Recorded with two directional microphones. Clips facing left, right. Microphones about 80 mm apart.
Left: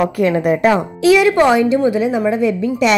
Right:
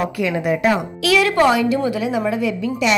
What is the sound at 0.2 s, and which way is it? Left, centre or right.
Speech, left.